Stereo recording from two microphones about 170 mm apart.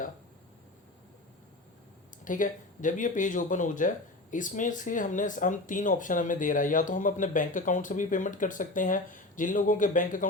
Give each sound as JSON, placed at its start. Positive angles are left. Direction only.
{"t": 2.2, "sound": "speech", "side_deg": 50}